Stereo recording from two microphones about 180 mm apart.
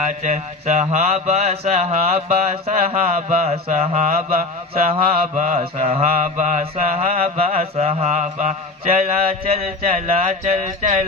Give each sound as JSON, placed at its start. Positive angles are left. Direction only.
{"t": 0.0, "sound": "mantra", "side_deg": -40}